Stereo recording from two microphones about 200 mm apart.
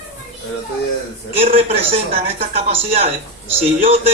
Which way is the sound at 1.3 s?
30° right (ahead or behind).